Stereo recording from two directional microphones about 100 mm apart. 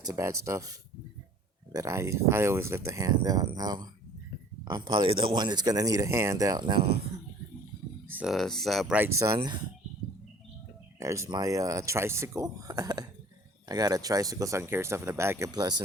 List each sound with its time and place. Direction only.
0.0 s speech: 35° right (ahead or behind)
5.0 s speech: 60° right (ahead or behind); by 6.7 s 40° right (ahead or behind)
6.7 s speech: 90° right
8.2 s speech: centre (ahead or behind)
9.3 s speech: 45° right (ahead or behind)
11.0 s speech: 30° right (ahead or behind)